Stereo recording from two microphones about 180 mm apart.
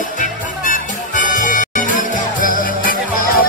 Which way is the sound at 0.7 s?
45° left (ahead or behind).